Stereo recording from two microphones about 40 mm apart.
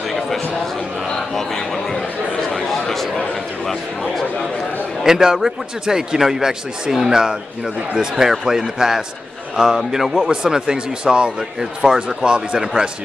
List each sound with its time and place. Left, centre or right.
1.3 s a sound: centre
5.0 s a man's voice: centre
8.3 s a man's voice: centre
11.8 s a man's voice: centre
12.2 s speech: right